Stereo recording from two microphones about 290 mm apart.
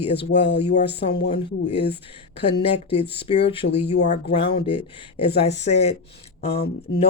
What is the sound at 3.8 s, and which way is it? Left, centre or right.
Speech, left.